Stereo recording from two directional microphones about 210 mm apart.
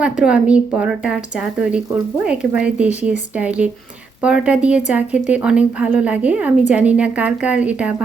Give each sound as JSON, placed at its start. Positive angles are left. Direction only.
{"t": 0.0, "sound": "a woman's voice", "side_deg": -5}